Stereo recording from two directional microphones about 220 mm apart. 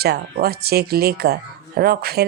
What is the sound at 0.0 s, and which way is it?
Speech, 45° right (ahead or behind).